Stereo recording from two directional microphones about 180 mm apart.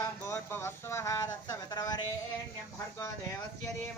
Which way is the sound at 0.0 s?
15° left (ahead or behind).